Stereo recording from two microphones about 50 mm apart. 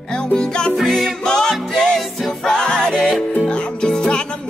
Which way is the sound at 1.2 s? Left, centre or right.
Centre.